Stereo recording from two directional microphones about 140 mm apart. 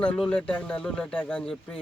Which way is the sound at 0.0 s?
10° left (ahead or behind).